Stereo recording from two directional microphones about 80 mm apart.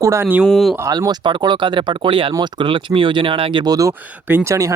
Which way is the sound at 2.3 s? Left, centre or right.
Right.